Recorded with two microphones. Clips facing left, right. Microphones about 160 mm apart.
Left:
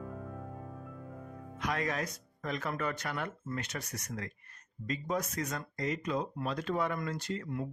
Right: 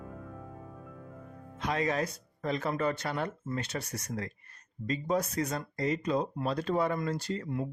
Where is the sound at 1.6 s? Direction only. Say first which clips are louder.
Right 4 dB; 25° right (ahead or behind).